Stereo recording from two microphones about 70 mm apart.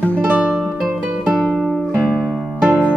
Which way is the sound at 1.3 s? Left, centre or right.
Centre.